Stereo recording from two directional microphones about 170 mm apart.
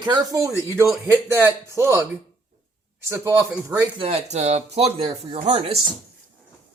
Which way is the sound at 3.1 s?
15° right (ahead or behind).